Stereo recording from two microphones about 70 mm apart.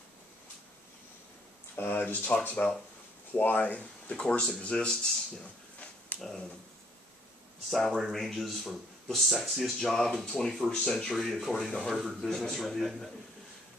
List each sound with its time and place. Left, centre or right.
1.8 s speech: left
6.1 s a sound: left
7.7 s speech: centre